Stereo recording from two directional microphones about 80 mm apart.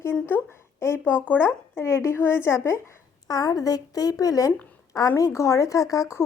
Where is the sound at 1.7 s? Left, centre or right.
Left.